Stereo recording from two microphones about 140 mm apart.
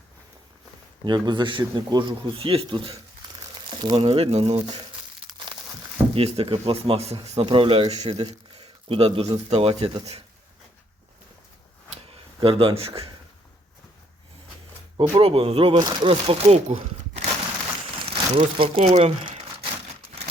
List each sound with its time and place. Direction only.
1.0 s speech: 35° right (ahead or behind)
6.1 s speech: 40° right (ahead or behind)
12.4 s speech: 40° right (ahead or behind)
14.9 s speech: 40° right (ahead or behind)